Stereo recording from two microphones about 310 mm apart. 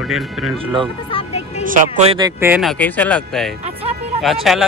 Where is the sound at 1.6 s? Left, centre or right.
Right.